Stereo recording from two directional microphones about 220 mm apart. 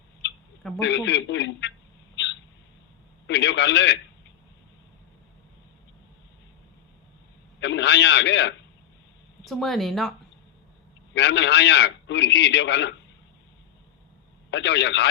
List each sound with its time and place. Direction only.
0.8 s a man's voice: 55° left (ahead or behind)
3.2 s a man's voice: 55° left (ahead or behind)
7.6 s a man's voice: 55° left (ahead or behind)
9.4 s speech: centre (ahead or behind)
11.1 s a man's voice: 55° left (ahead or behind)
14.5 s a man's voice: 55° left (ahead or behind)